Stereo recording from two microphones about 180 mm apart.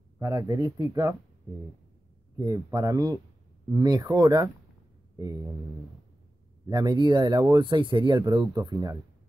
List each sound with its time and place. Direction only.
0.2 s speech: 20° right (ahead or behind)
2.3 s speech: 20° right (ahead or behind)
5.1 s a sound: 20° right (ahead or behind)
6.7 s speech: 20° right (ahead or behind)